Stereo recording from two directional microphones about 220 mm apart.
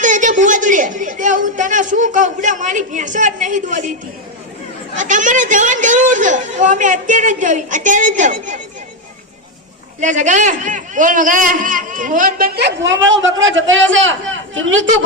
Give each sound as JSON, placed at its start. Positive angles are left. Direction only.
{"t": 0.0, "sound": "a man's voice", "side_deg": -35}
{"t": 4.9, "sound": "a man's voice", "side_deg": -35}
{"t": 10.0, "sound": "a man's voice", "side_deg": -35}